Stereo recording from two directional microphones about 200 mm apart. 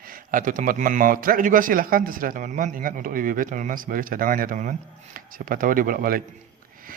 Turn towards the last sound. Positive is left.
turn(degrees=-45)  # may be behind; listen again after turning